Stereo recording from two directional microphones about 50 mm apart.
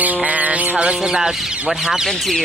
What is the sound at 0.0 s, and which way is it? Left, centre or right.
Music, right.